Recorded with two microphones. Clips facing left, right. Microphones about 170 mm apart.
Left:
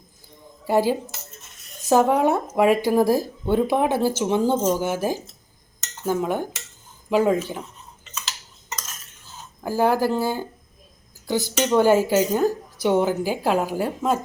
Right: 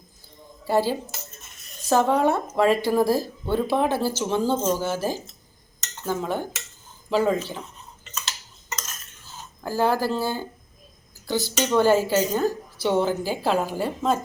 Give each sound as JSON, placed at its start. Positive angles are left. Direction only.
{"t": 0.7, "sound": "speech", "side_deg": 15}
{"t": 6.0, "sound": "cutlery", "side_deg": 10}
{"t": 7.1, "sound": "speech", "side_deg": 10}
{"t": 9.6, "sound": "speech", "side_deg": 15}